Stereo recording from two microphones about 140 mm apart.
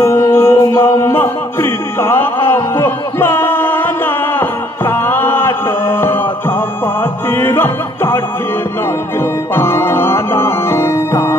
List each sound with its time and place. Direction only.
0.0 s music: 20° left (ahead or behind)
9.6 s music: 20° left (ahead or behind)